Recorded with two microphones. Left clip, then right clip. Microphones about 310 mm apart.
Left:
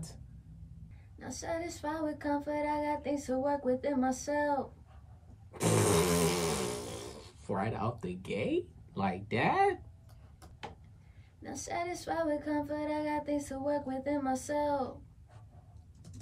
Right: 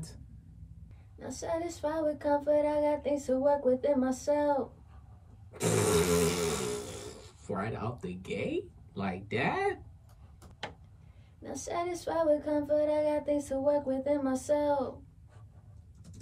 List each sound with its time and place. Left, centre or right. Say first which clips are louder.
1.2 s child singing: right 3 dB; centre
5.5 s snoring: right 1 dB; centre
11.4 s child singing: right 2 dB; centre